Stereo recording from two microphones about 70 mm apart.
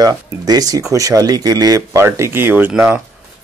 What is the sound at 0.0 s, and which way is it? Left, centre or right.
Speech, right.